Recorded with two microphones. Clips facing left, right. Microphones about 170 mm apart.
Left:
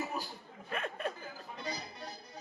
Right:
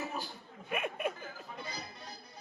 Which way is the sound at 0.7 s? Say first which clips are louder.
Right 2 dB; 15° right (ahead or behind).